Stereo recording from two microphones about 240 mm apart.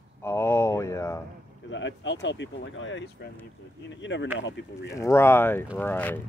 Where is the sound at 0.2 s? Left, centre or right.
Centre.